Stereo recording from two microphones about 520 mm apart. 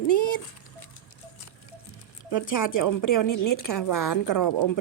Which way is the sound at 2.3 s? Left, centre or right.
Left.